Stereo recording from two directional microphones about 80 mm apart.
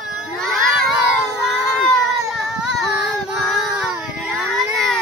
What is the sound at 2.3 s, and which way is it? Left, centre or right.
Child singing, centre.